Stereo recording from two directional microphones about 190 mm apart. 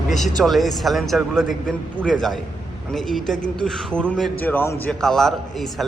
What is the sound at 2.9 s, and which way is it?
A man's voice, centre (ahead or behind).